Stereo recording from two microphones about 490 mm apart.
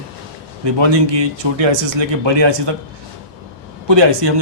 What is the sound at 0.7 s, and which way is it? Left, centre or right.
A man's voice, right.